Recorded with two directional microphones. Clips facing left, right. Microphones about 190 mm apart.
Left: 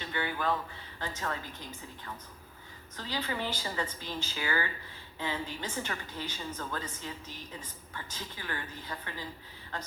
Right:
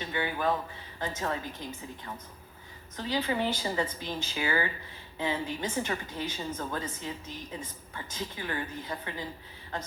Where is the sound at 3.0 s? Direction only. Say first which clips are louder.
Right 6 dB; 20° right (ahead or behind).